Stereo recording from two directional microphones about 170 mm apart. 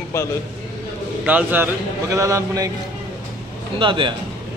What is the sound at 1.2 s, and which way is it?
A man's voice, 10° right (ahead or behind).